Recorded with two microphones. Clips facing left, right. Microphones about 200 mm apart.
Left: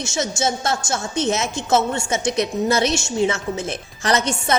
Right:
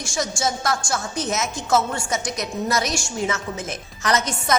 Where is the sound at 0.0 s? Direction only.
25° left (ahead or behind).